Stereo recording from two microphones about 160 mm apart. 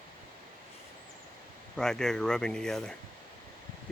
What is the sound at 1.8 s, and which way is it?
Speech, 5° left (ahead or behind).